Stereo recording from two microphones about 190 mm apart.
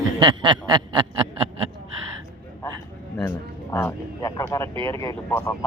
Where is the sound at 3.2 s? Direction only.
10° left (ahead or behind).